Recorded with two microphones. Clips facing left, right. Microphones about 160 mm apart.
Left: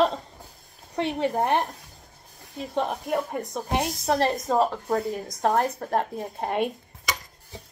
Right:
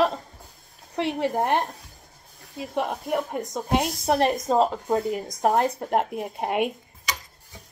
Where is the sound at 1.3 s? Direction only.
15° right (ahead or behind).